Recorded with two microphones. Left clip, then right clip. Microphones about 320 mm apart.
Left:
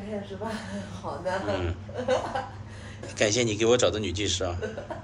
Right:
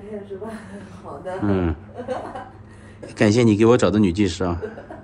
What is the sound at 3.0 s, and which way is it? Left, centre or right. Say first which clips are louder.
A man's voice: right 7 dB; right.